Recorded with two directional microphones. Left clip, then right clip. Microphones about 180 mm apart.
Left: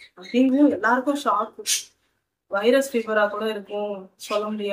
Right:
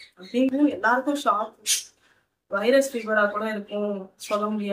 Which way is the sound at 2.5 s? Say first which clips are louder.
Left 1 dB; 15° left (ahead or behind).